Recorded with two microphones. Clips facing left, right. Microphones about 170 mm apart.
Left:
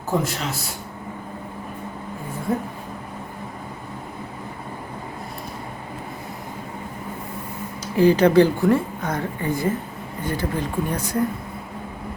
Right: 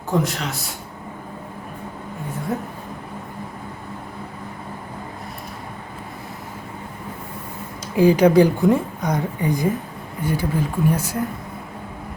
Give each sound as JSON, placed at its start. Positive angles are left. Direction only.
{"t": 0.1, "sound": "a man's voice", "side_deg": 0}
{"t": 2.5, "sound": "a man's voice", "side_deg": 0}
{"t": 7.9, "sound": "a woman's voice", "side_deg": -10}